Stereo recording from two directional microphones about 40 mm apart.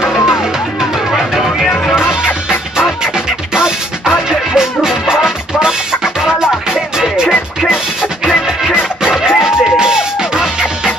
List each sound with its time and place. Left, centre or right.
2.0 s music: centre
3.5 s music: centre